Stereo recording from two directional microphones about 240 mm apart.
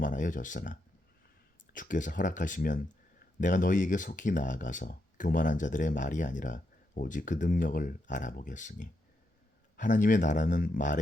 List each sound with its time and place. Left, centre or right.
0.0 s speech: left